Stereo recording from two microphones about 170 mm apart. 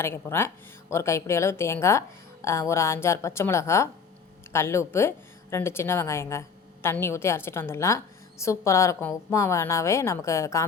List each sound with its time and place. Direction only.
0.0 s a woman's voice: 15° left (ahead or behind)